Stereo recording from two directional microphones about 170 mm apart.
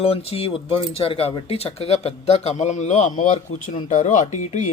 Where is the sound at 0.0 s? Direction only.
35° left (ahead or behind).